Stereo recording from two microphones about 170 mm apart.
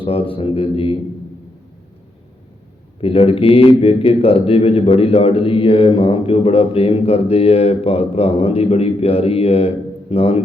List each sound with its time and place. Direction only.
0.0 s a man's voice: 35° left (ahead or behind)
3.0 s a man's voice: 35° left (ahead or behind)